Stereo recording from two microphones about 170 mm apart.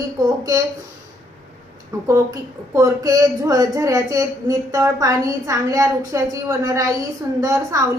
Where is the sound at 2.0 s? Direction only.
20° right (ahead or behind).